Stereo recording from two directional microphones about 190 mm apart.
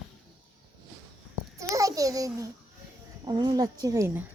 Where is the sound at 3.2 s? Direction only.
20° right (ahead or behind).